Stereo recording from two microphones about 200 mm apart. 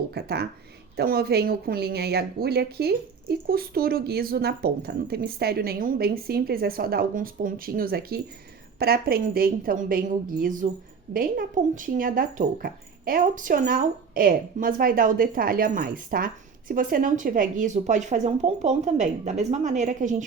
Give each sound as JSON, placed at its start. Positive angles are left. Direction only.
{"t": 0.1, "sound": "speech", "side_deg": -55}